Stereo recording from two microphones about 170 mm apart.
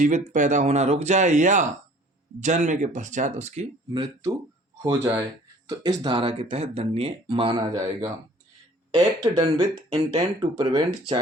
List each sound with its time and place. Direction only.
0.0 s speech: 50° right (ahead or behind)
3.9 s speech: 25° right (ahead or behind)